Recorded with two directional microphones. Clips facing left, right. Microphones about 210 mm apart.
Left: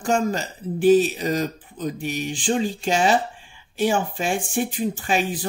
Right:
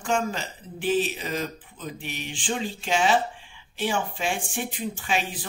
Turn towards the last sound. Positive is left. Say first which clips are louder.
# left 5 dB
turn(degrees=45)  # may be behind; listen again after turning